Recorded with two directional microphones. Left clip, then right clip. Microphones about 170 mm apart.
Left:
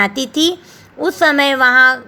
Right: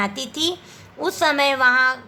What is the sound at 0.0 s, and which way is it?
A woman's voice, 25° left (ahead or behind).